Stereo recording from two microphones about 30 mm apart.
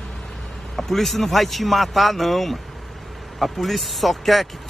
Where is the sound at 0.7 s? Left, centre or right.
Centre.